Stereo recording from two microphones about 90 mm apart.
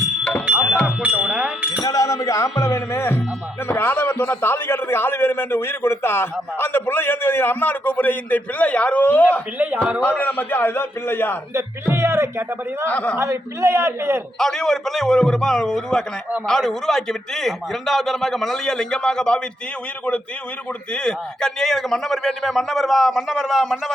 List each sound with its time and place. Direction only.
0.9 s a sound: 5° right (ahead or behind)
1.8 s a man's voice: 45° left (ahead or behind); by 9.2 s 15° left (ahead or behind)
9.6 s a man's voice: 15° right (ahead or behind)
10.0 s a man's voice: 20° left (ahead or behind)
11.5 s speech: 30° right (ahead or behind)
12.9 s a man's voice: 15° left (ahead or behind)
13.1 s speech: 30° right (ahead or behind)
14.3 s a man's voice: 5° left (ahead or behind)
20.9 s a man's voice: 10° left (ahead or behind)